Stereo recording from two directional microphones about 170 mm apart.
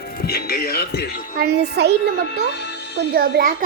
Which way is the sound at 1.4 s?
75° right (ahead or behind).